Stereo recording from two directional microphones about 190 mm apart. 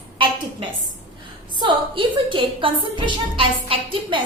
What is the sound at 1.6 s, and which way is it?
A woman's voice, 25° right (ahead or behind).